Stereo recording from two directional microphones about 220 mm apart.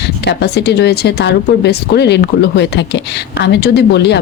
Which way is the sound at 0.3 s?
50° left (ahead or behind).